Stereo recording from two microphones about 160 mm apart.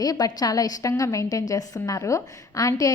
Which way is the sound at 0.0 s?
25° left (ahead or behind).